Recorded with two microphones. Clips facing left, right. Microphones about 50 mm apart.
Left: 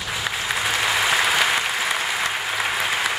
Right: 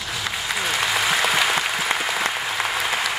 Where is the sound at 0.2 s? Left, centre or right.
Centre.